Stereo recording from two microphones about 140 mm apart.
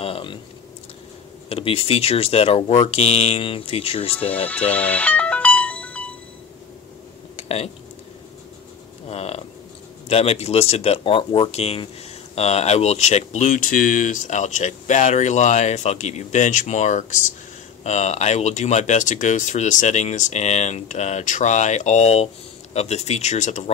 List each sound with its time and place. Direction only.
0.0 s a sound: 40° left (ahead or behind)
1.5 s speech: 40° left (ahead or behind)
4.3 s music: 10° left (ahead or behind)
7.3 s typing: 50° left (ahead or behind)
9.0 s a sound: 45° left (ahead or behind)
10.0 s speech: 45° left (ahead or behind)